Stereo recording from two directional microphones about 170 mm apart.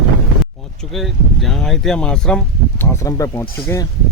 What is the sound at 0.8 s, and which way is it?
Speech, centre (ahead or behind).